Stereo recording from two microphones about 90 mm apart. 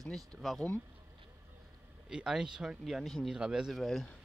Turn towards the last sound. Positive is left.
turn(degrees=0)  # may be behind; listen again after turning